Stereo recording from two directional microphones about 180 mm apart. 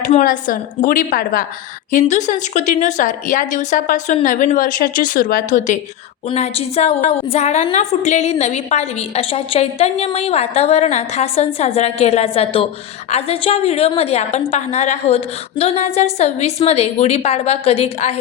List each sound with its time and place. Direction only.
0.1 s a woman's voice: 45° left (ahead or behind)